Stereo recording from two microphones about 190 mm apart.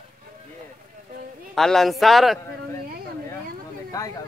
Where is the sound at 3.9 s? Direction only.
15° left (ahead or behind).